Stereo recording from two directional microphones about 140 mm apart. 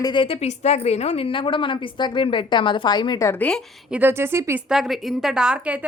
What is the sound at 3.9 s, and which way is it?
Speech, 15° right (ahead or behind).